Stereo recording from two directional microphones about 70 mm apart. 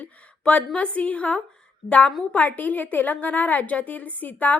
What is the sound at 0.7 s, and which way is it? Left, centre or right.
A woman's voice, centre.